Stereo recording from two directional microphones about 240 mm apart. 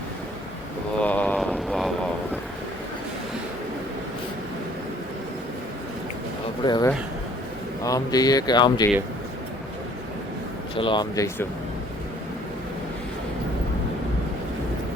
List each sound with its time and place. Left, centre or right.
1.0 s a sound: centre
6.7 s speech: centre
10.8 s speech: centre